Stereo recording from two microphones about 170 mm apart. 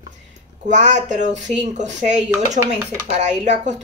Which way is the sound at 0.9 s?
45° right (ahead or behind).